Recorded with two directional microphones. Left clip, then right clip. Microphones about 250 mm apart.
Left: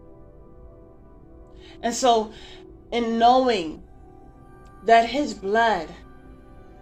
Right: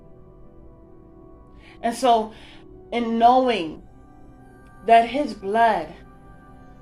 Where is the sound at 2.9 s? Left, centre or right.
Left.